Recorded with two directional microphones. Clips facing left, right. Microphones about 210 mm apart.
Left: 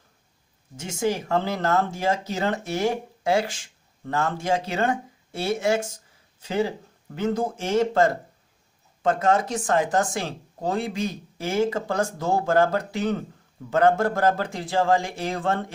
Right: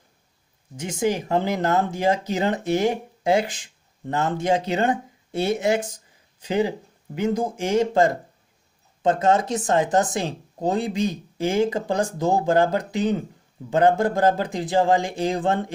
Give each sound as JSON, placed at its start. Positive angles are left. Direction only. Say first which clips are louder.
{"t": 0.7, "sound": "a man's voice", "louder": "right 2 dB", "side_deg": -15}